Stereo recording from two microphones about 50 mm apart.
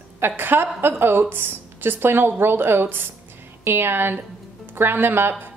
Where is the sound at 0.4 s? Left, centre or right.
Right.